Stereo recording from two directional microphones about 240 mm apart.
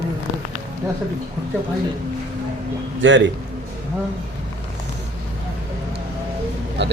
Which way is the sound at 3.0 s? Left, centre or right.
Right.